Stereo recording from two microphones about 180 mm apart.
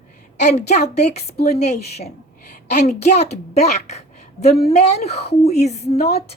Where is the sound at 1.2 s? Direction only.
60° left (ahead or behind).